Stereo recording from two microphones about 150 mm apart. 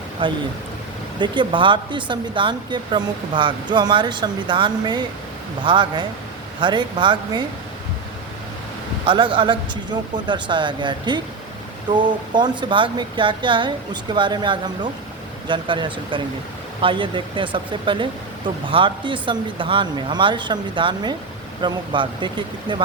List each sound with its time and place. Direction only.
0.2 s speech: 35° right (ahead or behind)
9.0 s speech: 35° right (ahead or behind)